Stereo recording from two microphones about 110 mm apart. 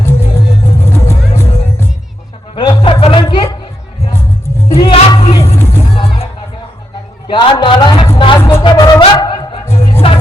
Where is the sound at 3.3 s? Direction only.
45° left (ahead or behind).